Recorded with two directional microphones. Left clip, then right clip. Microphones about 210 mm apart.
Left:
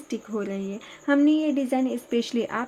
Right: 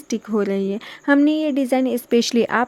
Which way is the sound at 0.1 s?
40° right (ahead or behind).